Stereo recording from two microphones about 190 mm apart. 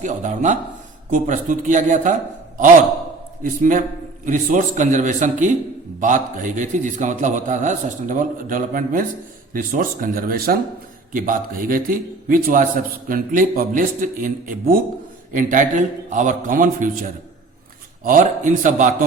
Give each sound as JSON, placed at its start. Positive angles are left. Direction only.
{"t": 0.0, "sound": "a man's voice", "side_deg": -40}
{"t": 3.4, "sound": "a man's voice", "side_deg": -45}